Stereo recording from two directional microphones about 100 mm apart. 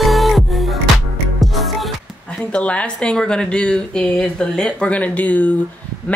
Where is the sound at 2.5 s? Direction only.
10° left (ahead or behind).